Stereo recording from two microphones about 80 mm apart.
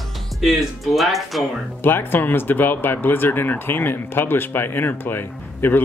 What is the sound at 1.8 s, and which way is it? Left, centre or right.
Speech, left.